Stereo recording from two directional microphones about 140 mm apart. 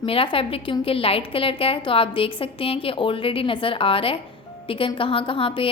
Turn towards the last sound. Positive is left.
turn(degrees=40)  # may be behind; listen again after turning